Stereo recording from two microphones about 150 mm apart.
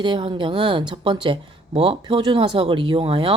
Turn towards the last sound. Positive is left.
turn(degrees=-35)  # may be behind; listen again after turning